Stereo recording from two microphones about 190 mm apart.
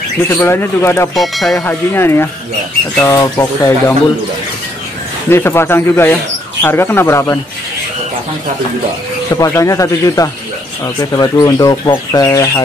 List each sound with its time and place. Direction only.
0.4 s speech: 15° left (ahead or behind)
1.1 s speech: centre (ahead or behind); by 3.7 s 15° left (ahead or behind)
5.3 s speech: 10° left (ahead or behind)
9.3 s speech: 15° left (ahead or behind)